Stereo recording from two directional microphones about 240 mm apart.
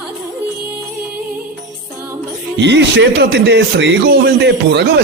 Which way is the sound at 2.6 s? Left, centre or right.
Right.